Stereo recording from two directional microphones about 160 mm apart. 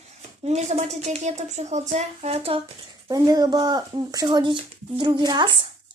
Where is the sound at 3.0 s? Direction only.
25° right (ahead or behind).